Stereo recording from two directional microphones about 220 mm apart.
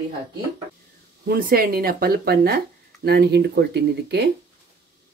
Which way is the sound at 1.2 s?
40° right (ahead or behind).